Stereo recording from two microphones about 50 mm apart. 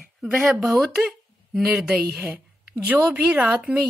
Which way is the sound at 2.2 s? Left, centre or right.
Right.